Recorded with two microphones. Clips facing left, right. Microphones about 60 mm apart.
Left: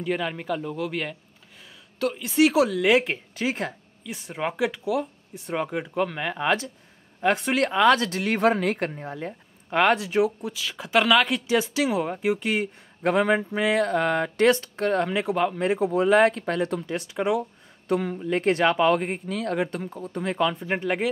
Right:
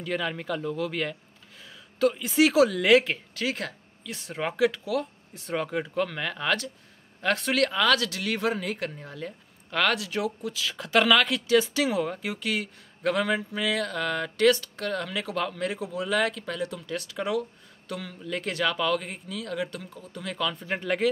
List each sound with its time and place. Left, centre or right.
0.0 s speech: centre
3.1 s speech: left
4.1 s speech: centre; by 8.8 s left
8.8 s speech: left
10.5 s speech: centre; by 16.8 s left
16.8 s speech: left